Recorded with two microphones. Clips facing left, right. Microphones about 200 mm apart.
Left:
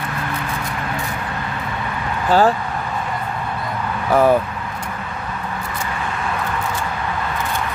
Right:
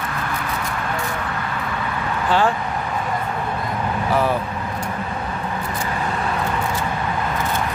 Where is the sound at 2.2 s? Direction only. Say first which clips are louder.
Left 4 dB; 40° left (ahead or behind).